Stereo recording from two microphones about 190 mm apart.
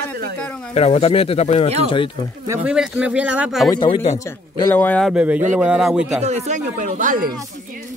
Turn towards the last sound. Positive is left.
turn(degrees=-45)  # may be behind; listen again after turning